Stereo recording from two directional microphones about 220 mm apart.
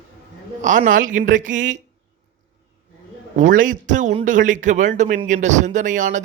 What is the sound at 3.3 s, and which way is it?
A man's voice, 35° right (ahead or behind).